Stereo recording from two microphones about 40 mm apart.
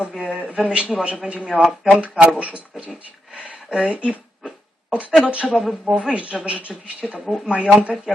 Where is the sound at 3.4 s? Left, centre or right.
Right.